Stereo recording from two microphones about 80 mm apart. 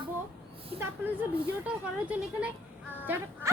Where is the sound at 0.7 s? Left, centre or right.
Right.